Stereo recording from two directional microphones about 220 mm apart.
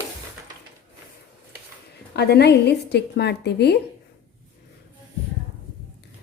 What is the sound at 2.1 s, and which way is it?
A woman's voice, 45° left (ahead or behind).